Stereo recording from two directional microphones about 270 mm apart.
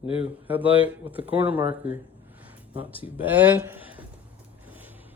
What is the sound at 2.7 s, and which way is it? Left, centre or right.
Speech, centre.